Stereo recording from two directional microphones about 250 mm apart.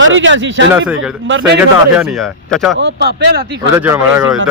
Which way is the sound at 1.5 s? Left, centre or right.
Centre.